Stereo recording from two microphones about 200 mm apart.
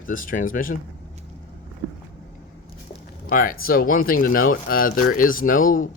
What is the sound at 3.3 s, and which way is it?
Speech, 45° left (ahead or behind).